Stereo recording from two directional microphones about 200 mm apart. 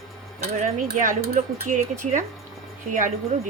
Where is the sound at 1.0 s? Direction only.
45° right (ahead or behind).